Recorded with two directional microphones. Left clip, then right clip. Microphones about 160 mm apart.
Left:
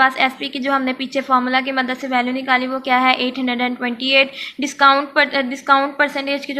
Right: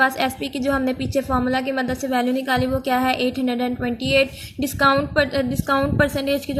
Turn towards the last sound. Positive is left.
turn(degrees=-55)  # may be behind; listen again after turning